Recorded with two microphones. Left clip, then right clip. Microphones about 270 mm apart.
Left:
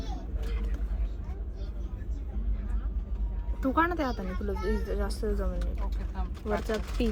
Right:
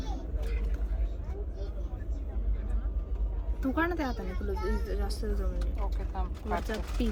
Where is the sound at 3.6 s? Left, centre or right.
Centre.